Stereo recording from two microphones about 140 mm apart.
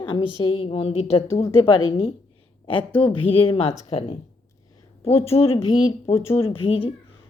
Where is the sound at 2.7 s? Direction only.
40° left (ahead or behind).